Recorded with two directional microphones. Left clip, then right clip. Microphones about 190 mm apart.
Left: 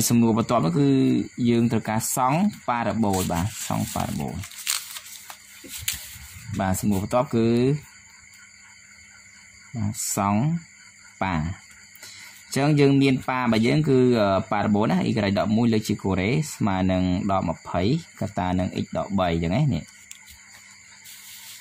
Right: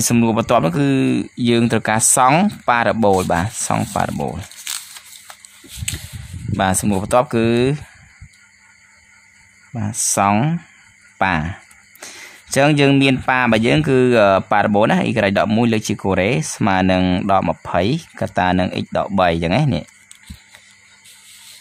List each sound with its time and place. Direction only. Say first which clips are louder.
0.0 s speech: right 5 dB; 35° right (ahead or behind); by 4.4 s 55° right (ahead or behind)
4.6 s a sound: left 1 dB; 15° left (ahead or behind)
6.5 s speech: right 8 dB; 45° right (ahead or behind)
9.8 s speech: right 9 dB; 45° right (ahead or behind)